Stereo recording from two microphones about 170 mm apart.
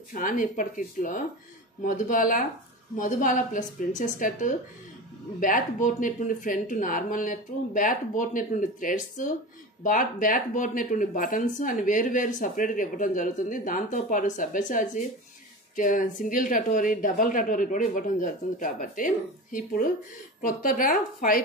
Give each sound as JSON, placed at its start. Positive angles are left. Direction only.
{"t": 0.1, "sound": "speech", "side_deg": 50}